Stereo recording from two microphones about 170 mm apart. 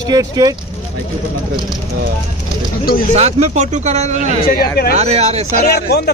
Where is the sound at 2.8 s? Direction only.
60° left (ahead or behind).